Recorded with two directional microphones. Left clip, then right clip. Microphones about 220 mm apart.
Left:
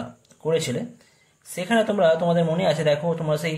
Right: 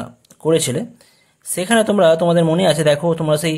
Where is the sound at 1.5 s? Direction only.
40° right (ahead or behind).